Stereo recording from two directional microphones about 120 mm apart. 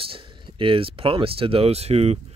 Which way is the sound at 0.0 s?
45° right (ahead or behind).